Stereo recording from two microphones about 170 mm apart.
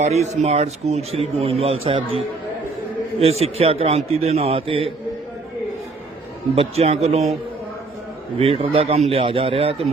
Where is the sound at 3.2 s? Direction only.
35° right (ahead or behind).